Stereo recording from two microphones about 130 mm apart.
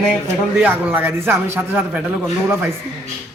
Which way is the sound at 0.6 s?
15° right (ahead or behind).